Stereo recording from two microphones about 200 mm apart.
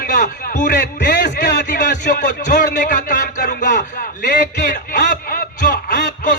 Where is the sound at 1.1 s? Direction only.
60° left (ahead or behind).